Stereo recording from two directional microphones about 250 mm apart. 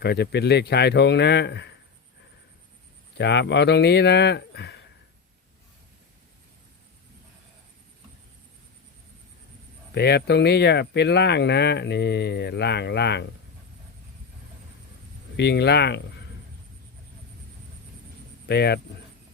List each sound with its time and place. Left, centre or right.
0.0 s a man's voice: left
3.2 s speech: left
9.9 s speech: left
15.4 s speech: left
18.4 s a man's voice: left